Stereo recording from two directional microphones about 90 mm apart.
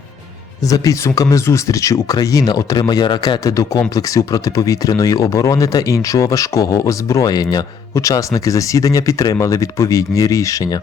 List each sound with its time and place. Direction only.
0.7 s speech: 40° left (ahead or behind)
3.4 s speech: 40° left (ahead or behind)
7.9 s speech: 40° left (ahead or behind)